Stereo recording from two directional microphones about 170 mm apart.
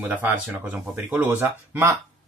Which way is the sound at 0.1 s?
10° right (ahead or behind).